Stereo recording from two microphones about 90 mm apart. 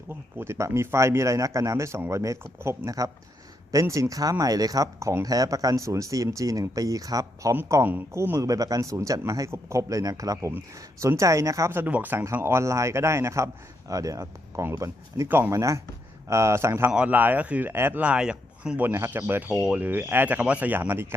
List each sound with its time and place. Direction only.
0.1 s speech: 25° right (ahead or behind)
7.9 s speech: 25° right (ahead or behind)
8.4 s speech: 40° right (ahead or behind)
11.9 s speech: 20° right (ahead or behind)
12.4 s speech: 30° right (ahead or behind)
16.9 s speech: 15° right (ahead or behind)
18.0 s speech: 10° right (ahead or behind)
18.9 s speech: 25° right (ahead or behind)